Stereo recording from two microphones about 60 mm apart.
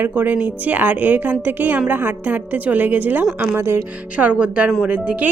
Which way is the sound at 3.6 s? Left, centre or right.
Right.